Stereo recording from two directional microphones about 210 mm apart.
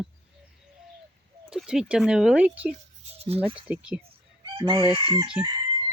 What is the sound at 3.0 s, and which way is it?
Speech, 30° right (ahead or behind).